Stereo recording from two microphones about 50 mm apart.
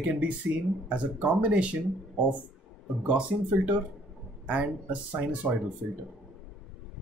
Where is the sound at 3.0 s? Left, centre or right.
Right.